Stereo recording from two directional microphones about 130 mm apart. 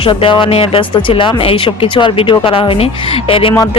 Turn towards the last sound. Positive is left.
turn(degrees=45)  # may be behind; listen again after turning